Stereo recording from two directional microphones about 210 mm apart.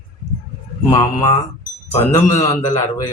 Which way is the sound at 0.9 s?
15° left (ahead or behind).